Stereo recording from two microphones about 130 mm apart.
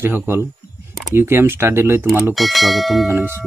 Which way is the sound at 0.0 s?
15° right (ahead or behind).